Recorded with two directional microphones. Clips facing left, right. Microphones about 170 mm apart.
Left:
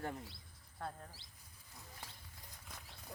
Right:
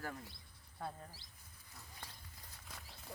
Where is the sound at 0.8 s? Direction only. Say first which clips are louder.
Even; 5° right (ahead or behind).